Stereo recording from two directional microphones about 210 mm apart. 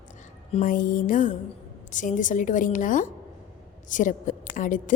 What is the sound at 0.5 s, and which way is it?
A woman's voice, 40° left (ahead or behind).